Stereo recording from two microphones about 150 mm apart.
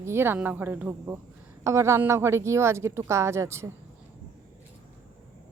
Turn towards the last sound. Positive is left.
turn(degrees=-15)  # may be behind; listen again after turning